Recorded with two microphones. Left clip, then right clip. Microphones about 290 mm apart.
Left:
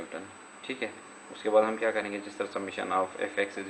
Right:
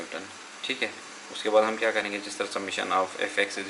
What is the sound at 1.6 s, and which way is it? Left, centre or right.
Speech, centre.